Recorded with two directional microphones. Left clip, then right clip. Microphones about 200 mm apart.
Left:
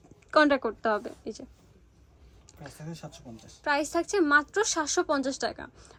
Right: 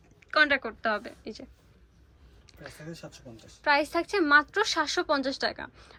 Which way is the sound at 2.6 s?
5° left (ahead or behind).